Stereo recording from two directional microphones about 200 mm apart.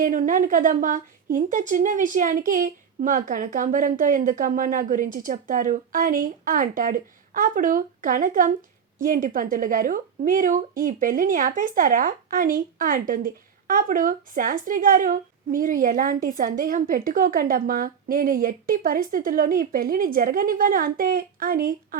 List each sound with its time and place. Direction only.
0.0 s a woman's voice: 40° right (ahead or behind)